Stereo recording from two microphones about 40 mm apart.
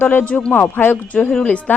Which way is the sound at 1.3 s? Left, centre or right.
Left.